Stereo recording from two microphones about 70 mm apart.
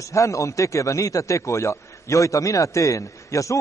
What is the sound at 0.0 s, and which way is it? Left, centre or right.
A man's voice, left.